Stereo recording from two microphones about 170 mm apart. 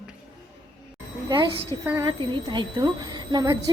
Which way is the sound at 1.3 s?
25° right (ahead or behind).